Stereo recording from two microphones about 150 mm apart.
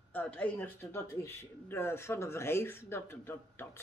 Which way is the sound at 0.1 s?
10° left (ahead or behind).